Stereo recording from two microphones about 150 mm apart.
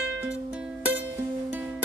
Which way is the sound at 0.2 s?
10° right (ahead or behind).